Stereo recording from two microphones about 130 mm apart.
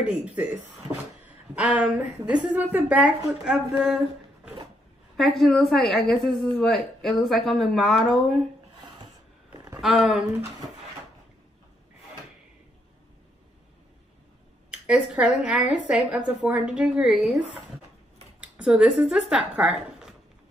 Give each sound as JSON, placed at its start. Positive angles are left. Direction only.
{"t": 0.0, "sound": "a woman's voice", "side_deg": -10}
{"t": 1.5, "sound": "a woman's voice", "side_deg": -10}
{"t": 5.1, "sound": "a woman's voice", "side_deg": 0}
{"t": 9.8, "sound": "a woman's voice", "side_deg": 0}
{"t": 14.7, "sound": "a woman's voice", "side_deg": -5}